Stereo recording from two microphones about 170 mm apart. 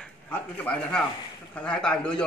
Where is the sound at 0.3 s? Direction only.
5° left (ahead or behind).